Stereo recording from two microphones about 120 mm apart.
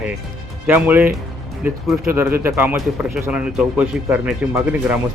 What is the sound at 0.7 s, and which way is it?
Speech, 15° right (ahead or behind).